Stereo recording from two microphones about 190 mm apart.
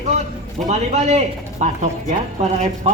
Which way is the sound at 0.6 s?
35° right (ahead or behind).